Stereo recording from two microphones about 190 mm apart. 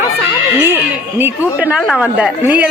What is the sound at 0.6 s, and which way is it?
Speech, 10° right (ahead or behind).